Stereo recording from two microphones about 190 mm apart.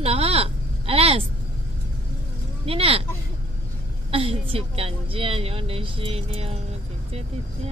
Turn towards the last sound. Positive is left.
turn(degrees=-30)  # may be behind; listen again after turning